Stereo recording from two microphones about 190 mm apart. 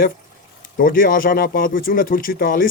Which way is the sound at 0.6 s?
50° left (ahead or behind).